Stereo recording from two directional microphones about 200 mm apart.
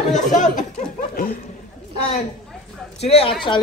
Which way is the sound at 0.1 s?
40° left (ahead or behind).